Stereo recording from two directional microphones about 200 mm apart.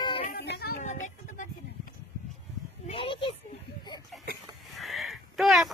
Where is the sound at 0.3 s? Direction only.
55° left (ahead or behind).